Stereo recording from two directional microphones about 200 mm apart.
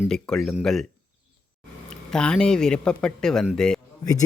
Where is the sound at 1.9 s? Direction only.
5° left (ahead or behind).